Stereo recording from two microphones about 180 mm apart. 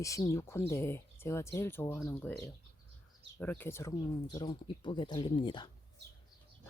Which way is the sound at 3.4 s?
10° left (ahead or behind).